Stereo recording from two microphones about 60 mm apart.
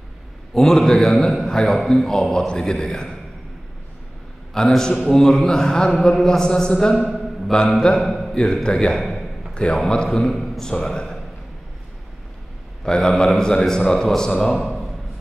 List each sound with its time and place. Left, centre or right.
0.6 s a man's voice: centre
4.6 s a man's voice: centre
7.1 s a sound: centre
8.0 s a man's voice: centre
12.8 s a man's voice: centre